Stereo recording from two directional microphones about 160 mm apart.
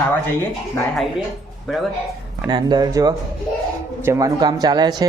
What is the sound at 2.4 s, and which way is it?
Speech, 25° right (ahead or behind).